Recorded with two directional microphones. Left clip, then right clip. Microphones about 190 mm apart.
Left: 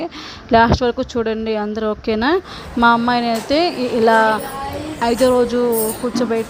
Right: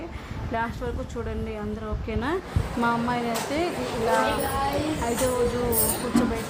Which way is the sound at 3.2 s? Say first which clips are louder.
Left 10 dB; centre (ahead or behind).